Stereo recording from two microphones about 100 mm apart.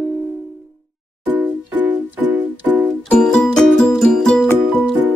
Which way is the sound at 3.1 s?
5° left (ahead or behind).